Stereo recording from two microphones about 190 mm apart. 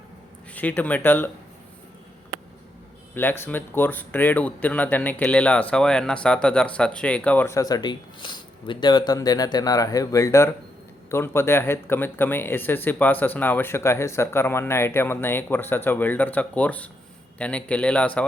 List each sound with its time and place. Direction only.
0.5 s speech: 10° left (ahead or behind)
3.2 s speech: 10° left (ahead or behind)